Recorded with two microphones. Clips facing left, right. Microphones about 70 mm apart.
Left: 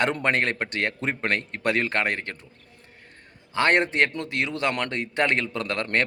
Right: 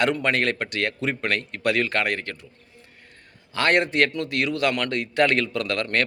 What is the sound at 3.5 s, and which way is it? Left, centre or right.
A man's voice, left.